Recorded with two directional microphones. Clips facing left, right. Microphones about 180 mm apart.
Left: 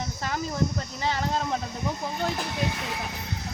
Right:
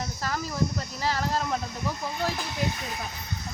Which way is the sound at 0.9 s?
20° left (ahead or behind).